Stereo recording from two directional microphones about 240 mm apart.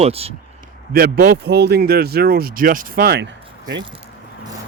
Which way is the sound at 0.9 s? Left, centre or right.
Right.